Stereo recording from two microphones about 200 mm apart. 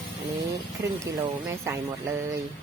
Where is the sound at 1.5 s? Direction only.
15° right (ahead or behind).